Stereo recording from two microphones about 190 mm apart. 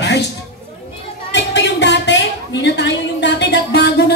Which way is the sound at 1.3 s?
65° left (ahead or behind).